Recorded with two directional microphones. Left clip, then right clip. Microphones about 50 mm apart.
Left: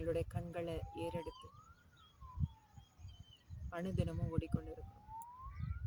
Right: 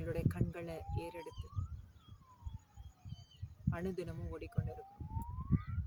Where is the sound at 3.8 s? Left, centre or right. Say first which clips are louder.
Right 2 dB; right.